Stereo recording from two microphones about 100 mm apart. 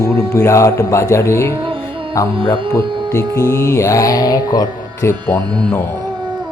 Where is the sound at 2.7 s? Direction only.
30° left (ahead or behind).